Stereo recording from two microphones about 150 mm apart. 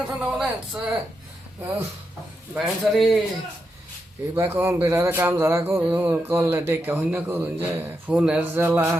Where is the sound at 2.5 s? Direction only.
10° right (ahead or behind).